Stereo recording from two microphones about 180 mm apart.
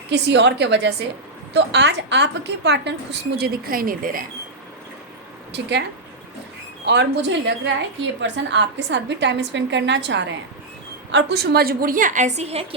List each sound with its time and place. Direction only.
0.1 s a woman's voice: 75° right (ahead or behind); by 4.2 s 50° right (ahead or behind)
5.5 s speech: 70° right (ahead or behind)
6.8 s a woman's voice: 75° right (ahead or behind)
11.1 s a woman's voice: 70° right (ahead or behind); by 12.6 s 35° right (ahead or behind)